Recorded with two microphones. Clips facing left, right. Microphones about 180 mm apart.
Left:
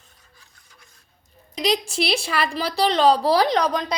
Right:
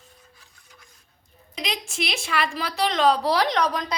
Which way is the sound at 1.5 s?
35° left (ahead or behind).